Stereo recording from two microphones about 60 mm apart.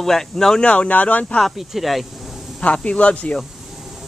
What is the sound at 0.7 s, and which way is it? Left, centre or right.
Speech, left.